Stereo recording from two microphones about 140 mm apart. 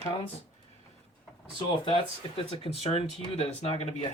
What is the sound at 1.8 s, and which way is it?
Speech, 40° left (ahead or behind).